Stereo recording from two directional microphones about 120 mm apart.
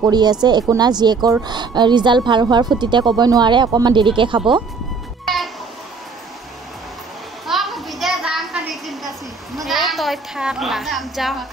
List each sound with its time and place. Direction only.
0.1 s speech: 35° right (ahead or behind)
5.2 s music: centre (ahead or behind)
7.4 s a sound: centre (ahead or behind)